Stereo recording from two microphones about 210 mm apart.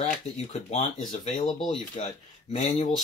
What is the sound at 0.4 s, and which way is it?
Speech, 30° left (ahead or behind).